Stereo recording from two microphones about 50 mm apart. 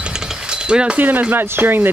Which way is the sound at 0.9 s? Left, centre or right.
Right.